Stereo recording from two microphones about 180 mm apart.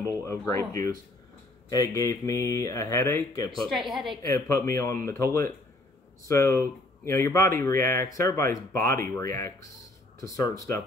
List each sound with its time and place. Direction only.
0.2 s speech: 15° left (ahead or behind)
3.6 s a woman's voice: centre (ahead or behind)
4.2 s speech: 15° left (ahead or behind)